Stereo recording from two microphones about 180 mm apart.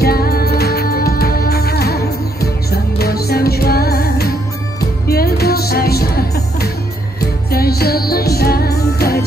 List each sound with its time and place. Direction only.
0.0 s music: 60° left (ahead or behind)